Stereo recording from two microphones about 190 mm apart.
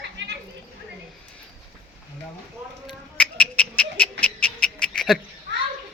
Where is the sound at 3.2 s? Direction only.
5° left (ahead or behind).